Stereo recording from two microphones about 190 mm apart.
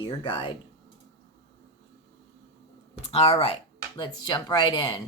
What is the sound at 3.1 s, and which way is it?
Speech, 30° left (ahead or behind).